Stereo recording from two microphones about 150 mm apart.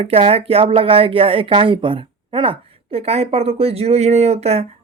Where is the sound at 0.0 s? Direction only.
40° right (ahead or behind).